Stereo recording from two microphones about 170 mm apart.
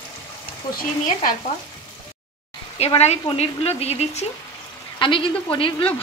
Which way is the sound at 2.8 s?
40° left (ahead or behind).